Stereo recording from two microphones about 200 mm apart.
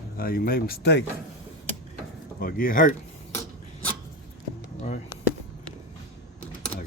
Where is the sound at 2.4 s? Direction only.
45° left (ahead or behind).